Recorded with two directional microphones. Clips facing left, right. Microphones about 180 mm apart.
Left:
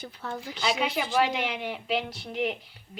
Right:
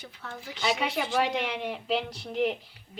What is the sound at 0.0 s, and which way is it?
Speech, 35° left (ahead or behind).